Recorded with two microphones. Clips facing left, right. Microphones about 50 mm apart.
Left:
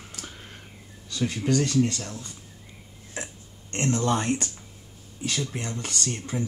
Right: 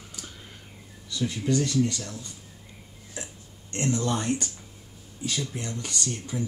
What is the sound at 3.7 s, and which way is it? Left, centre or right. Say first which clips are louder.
Speech: left 2 dB; left.